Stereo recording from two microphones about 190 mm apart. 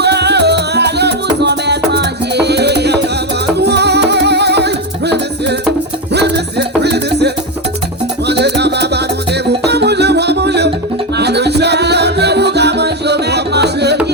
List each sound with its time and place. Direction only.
0.0 s music: 60° right (ahead or behind)